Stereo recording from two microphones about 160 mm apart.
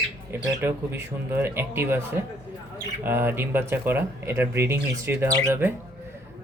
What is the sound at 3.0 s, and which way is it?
A man's voice, 15° right (ahead or behind).